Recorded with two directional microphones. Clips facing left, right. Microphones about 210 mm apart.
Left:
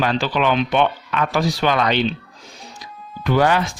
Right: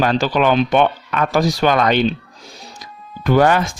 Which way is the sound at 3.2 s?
50° right (ahead or behind).